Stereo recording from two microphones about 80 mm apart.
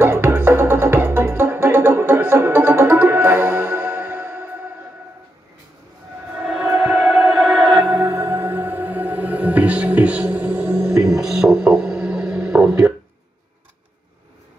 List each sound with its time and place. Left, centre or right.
0.0 s music: right
6.3 s music: centre
7.0 s music: centre
8.0 s music: right
10.9 s music: centre